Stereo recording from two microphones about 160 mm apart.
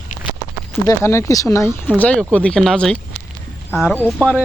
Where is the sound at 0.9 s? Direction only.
20° left (ahead or behind).